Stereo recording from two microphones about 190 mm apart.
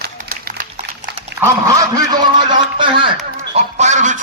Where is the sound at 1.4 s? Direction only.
15° right (ahead or behind).